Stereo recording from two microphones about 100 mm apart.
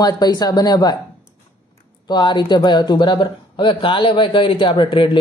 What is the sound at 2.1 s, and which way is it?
Speech, 45° left (ahead or behind).